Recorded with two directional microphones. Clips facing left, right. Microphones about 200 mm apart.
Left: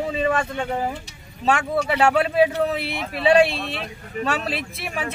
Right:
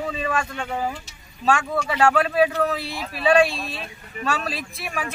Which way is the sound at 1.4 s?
20° left (ahead or behind).